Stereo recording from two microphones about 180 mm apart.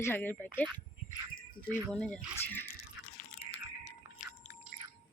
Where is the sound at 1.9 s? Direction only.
5° left (ahead or behind).